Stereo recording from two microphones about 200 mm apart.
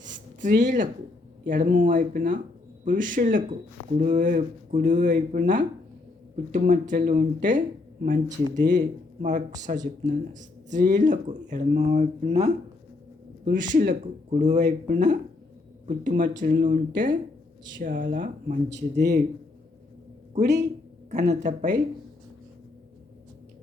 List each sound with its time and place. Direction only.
0.0 s a sound: 40° right (ahead or behind)
1.5 s speech: 40° right (ahead or behind)
20.3 s speech: 35° right (ahead or behind)